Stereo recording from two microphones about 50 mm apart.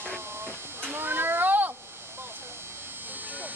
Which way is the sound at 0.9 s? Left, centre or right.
Right.